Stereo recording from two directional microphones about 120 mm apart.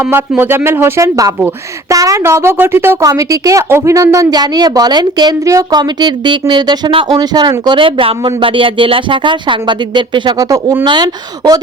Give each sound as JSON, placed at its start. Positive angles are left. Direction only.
{"t": 0.0, "sound": "a woman's voice", "side_deg": -20}
{"t": 10.3, "sound": "speech", "side_deg": -30}